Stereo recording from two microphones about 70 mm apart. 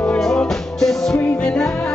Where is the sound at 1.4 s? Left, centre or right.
Centre.